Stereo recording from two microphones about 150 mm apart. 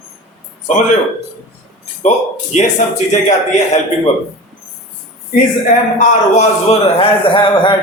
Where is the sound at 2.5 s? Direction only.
50° left (ahead or behind).